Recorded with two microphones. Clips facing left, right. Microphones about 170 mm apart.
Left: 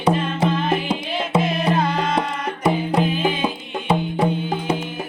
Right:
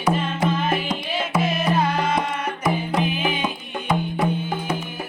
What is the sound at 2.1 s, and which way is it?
Music, 30° left (ahead or behind).